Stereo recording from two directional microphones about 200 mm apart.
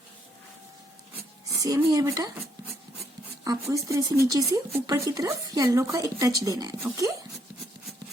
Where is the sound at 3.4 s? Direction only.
15° right (ahead or behind).